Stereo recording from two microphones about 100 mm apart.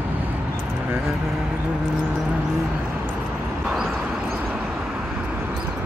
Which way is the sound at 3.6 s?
5° right (ahead or behind).